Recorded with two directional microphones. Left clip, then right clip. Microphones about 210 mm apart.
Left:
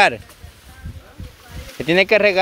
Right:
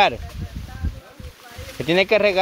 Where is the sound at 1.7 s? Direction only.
20° left (ahead or behind).